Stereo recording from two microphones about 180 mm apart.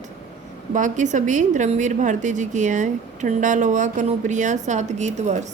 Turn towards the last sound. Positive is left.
turn(degrees=-40)  # may be behind; listen again after turning